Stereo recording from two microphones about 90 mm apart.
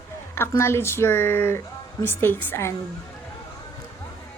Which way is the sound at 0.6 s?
30° left (ahead or behind).